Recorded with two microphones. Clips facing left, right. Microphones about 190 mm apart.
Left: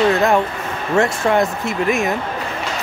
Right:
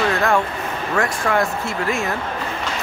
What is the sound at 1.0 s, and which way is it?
Speech, 25° left (ahead or behind).